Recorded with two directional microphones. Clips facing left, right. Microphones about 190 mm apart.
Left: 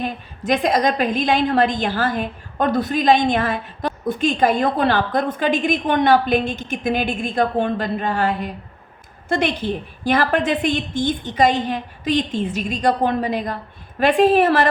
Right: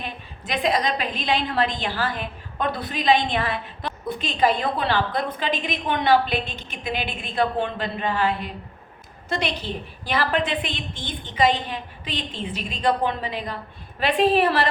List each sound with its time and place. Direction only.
0.0 s a woman's voice: 45° left (ahead or behind)